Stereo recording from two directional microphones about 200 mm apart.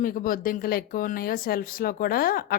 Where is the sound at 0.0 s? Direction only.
45° left (ahead or behind).